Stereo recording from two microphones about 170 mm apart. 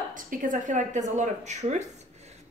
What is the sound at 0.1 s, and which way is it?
Speech, 50° right (ahead or behind).